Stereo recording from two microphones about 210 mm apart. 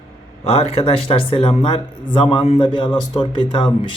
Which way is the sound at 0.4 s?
30° left (ahead or behind).